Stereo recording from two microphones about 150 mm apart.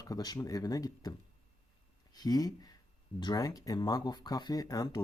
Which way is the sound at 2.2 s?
25° left (ahead or behind).